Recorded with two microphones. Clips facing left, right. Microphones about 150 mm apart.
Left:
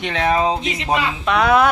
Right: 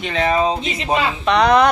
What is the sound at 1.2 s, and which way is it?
Speech, 5° left (ahead or behind).